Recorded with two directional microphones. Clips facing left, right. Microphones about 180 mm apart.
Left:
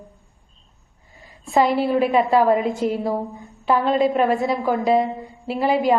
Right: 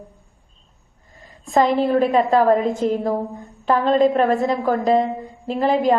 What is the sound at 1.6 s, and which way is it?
A woman's voice, 5° left (ahead or behind).